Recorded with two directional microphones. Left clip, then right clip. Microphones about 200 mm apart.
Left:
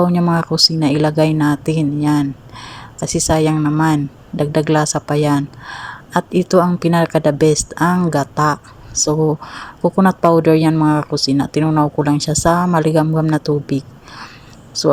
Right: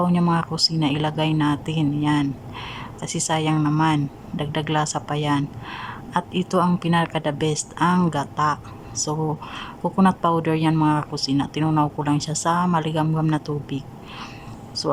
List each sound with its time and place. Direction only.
0.0 s speech: 15° left (ahead or behind)
3.5 s speech: 5° left (ahead or behind)
3.8 s speech: 20° left (ahead or behind)